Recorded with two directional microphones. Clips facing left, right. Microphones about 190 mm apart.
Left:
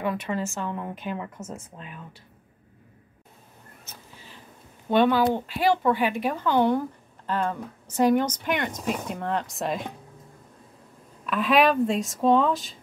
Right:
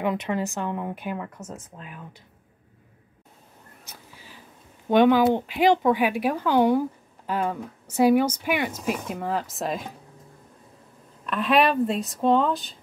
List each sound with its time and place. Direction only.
0.0 s a woman's voice: 20° right (ahead or behind); by 2.0 s centre (ahead or behind)
3.8 s a sound: 10° right (ahead or behind)
4.8 s a woman's voice: 15° right (ahead or behind)
11.2 s speech: centre (ahead or behind)